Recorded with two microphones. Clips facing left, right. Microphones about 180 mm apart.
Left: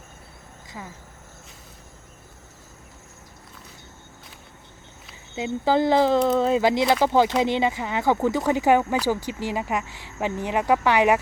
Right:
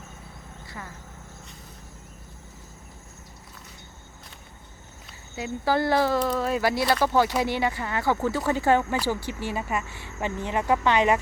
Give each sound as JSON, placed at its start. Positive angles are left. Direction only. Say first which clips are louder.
{"t": 5.3, "sound": "speech", "louder": "left 3 dB", "side_deg": 20}